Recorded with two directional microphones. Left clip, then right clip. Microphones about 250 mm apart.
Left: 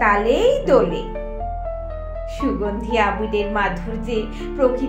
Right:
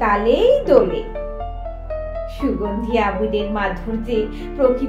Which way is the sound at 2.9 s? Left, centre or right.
Left.